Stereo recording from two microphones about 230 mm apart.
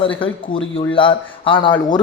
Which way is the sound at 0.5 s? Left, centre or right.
Left.